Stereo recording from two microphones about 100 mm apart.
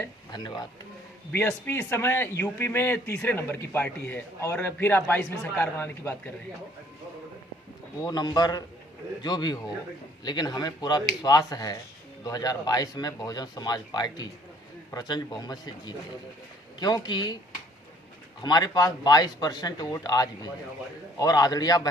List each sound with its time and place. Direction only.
0.3 s speech: 45° left (ahead or behind)
1.3 s speech: 20° left (ahead or behind)
8.0 s a man's voice: 45° left (ahead or behind)
18.4 s a man's voice: 40° left (ahead or behind)